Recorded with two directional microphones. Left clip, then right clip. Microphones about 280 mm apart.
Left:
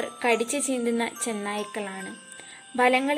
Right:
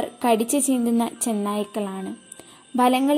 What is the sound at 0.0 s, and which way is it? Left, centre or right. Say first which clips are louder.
A woman's voice: right 3 dB; centre.